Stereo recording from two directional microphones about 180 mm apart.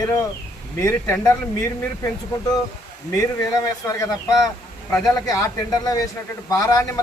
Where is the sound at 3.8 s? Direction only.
20° left (ahead or behind).